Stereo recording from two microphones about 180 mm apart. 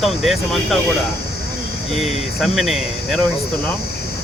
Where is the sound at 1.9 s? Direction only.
Centre (ahead or behind).